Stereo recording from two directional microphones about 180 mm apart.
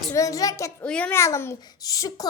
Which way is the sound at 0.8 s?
5° left (ahead or behind).